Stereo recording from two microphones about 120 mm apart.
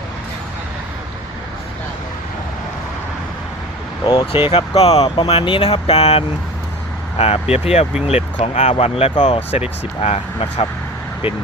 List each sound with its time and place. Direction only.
4.0 s speech: 40° left (ahead or behind)
4.4 s speech: 55° left (ahead or behind)
5.0 s speech: 35° left (ahead or behind)
5.3 s speech: 50° left (ahead or behind); by 8.7 s 70° left (ahead or behind)
8.7 s speech: 55° left (ahead or behind)
9.1 s speech: 40° left (ahead or behind)
9.5 s speech: 60° left (ahead or behind)